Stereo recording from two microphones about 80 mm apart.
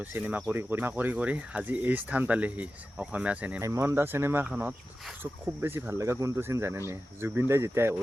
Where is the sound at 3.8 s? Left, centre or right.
Right.